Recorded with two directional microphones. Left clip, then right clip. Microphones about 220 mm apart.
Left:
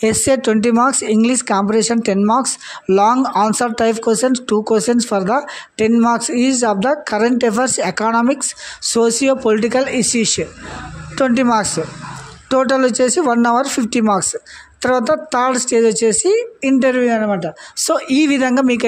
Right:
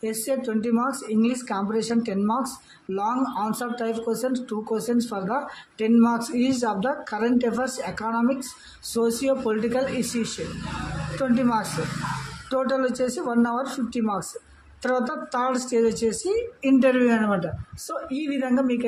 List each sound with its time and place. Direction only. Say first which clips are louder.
0.0 s speech: left 12 dB; 40° left (ahead or behind)
17.8 s speech: left 15 dB; 50° left (ahead or behind)